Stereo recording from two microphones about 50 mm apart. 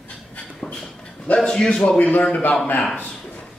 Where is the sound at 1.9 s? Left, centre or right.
Left.